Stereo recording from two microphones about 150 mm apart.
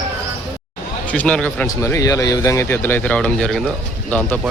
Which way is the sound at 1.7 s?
20° left (ahead or behind).